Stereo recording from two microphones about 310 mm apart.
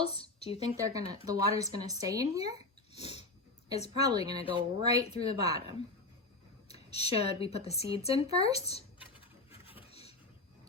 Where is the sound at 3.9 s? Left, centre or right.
Centre.